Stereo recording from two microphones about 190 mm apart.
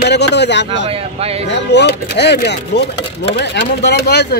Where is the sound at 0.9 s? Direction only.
30° right (ahead or behind).